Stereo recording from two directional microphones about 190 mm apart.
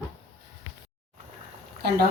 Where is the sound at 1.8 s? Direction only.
60° right (ahead or behind).